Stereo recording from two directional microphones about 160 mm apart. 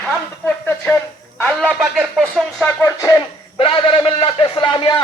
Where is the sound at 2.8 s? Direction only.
20° left (ahead or behind).